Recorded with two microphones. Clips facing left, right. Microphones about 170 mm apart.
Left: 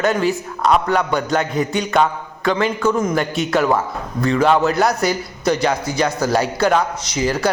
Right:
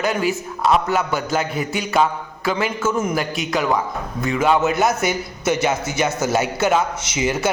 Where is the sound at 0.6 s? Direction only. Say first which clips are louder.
Left 2 dB; 5° right (ahead or behind).